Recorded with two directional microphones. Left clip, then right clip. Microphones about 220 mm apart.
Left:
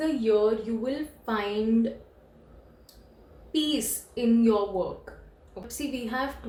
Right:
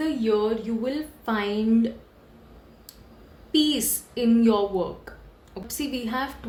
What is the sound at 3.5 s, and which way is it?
Speech, 40° right (ahead or behind).